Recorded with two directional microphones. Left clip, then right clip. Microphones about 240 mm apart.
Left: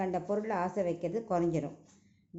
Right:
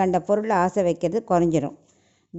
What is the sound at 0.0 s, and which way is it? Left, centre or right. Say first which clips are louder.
Speech: right 12 dB; right.